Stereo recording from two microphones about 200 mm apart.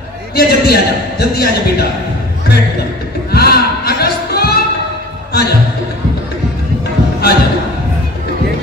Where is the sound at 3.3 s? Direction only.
50° left (ahead or behind).